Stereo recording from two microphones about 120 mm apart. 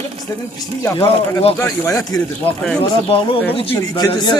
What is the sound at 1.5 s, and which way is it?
Speech, 25° left (ahead or behind).